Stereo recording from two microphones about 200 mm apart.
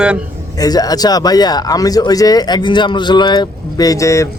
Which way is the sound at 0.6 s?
20° left (ahead or behind).